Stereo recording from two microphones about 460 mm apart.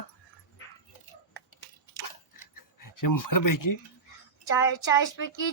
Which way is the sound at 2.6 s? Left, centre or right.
Left.